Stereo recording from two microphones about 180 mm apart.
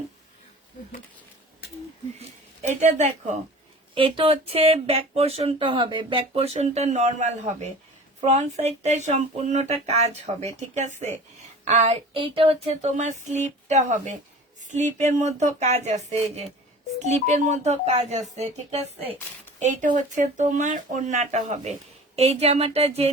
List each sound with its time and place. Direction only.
2.1 s speech: 40° right (ahead or behind)
3.9 s speech: 30° right (ahead or behind)